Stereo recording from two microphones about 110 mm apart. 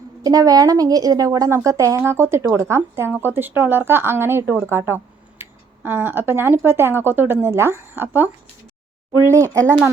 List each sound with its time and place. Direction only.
0.2 s a woman's voice: 35° right (ahead or behind); by 8.3 s 20° right (ahead or behind)
9.2 s a woman's voice: 30° right (ahead or behind)